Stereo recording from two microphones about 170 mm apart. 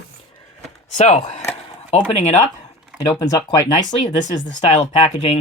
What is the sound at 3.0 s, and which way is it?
Speech, 20° left (ahead or behind).